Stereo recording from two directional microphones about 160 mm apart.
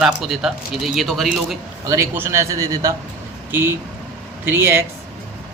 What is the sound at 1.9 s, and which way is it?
A man's voice, 15° right (ahead or behind).